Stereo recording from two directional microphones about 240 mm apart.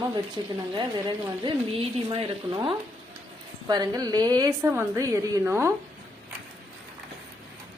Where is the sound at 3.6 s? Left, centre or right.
Centre.